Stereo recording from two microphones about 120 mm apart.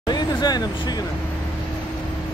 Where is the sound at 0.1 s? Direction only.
35° left (ahead or behind).